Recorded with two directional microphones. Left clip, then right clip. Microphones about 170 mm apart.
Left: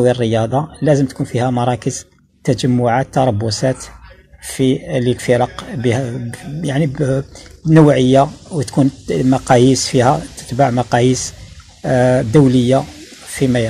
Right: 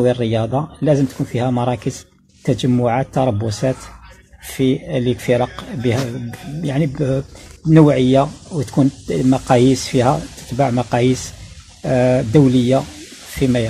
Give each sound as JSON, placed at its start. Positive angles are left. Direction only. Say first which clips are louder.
{"t": 0.0, "sound": "speech", "louder": "left 3 dB", "side_deg": -20}